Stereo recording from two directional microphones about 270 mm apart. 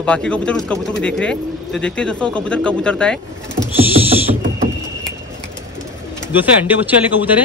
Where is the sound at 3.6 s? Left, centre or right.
Right.